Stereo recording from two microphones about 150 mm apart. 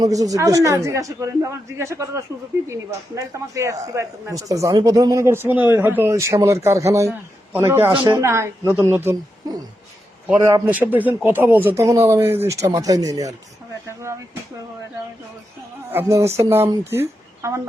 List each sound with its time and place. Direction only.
0.0 s a man's voice: 25° right (ahead or behind)
7.9 s a man's voice: 25° right (ahead or behind)
10.3 s a man's voice: 30° right (ahead or behind)
10.7 s a man's voice: 10° right (ahead or behind)
15.9 s speech: 15° right (ahead or behind)